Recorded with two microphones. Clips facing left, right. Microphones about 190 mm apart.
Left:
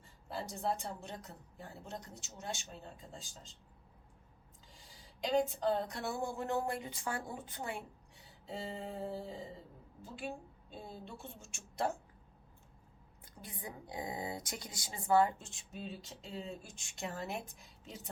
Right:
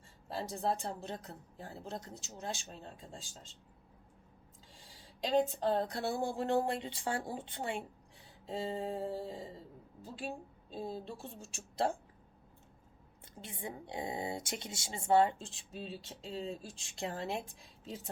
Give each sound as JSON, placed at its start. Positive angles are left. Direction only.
{"t": 0.3, "sound": "a woman's voice", "side_deg": -35}
{"t": 5.5, "sound": "a woman's voice", "side_deg": -35}
{"t": 13.2, "sound": "speech", "side_deg": -25}